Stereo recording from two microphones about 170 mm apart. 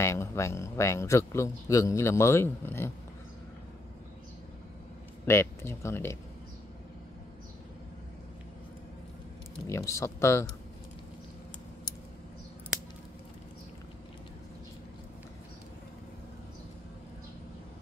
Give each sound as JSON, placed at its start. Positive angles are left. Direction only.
{"t": 0.0, "sound": "speech", "side_deg": 15}
{"t": 5.2, "sound": "speech", "side_deg": 15}
{"t": 9.7, "sound": "speech", "side_deg": 15}